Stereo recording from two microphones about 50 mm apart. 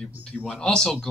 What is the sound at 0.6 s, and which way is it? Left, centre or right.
Speech, centre.